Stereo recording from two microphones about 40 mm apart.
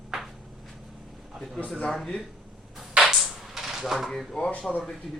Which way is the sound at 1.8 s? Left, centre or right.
Centre.